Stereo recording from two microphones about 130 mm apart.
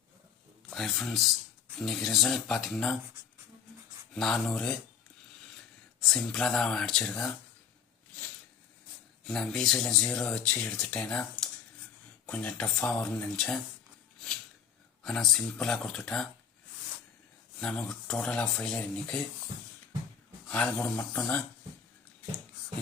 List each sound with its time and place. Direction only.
0.7 s speech: centre (ahead or behind)
4.1 s speech: 5° left (ahead or behind)
6.0 s speech: 5° left (ahead or behind)
9.2 s speech: 5° left (ahead or behind)
15.0 s speech: 5° left (ahead or behind)
17.6 s speech: 5° left (ahead or behind)
20.5 s speech: 10° left (ahead or behind)